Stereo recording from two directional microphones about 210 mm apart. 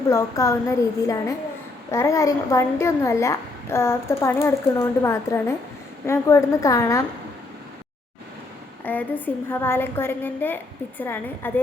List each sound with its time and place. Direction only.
0.1 s a woman's voice: 15° left (ahead or behind)
8.8 s a woman's voice: 10° left (ahead or behind)